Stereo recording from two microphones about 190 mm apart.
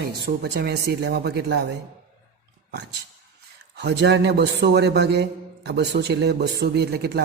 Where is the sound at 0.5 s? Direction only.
60° right (ahead or behind).